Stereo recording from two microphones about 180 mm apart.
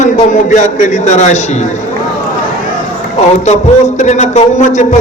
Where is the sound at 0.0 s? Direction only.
45° left (ahead or behind).